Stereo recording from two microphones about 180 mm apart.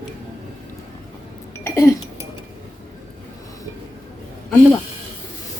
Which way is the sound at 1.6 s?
15° left (ahead or behind).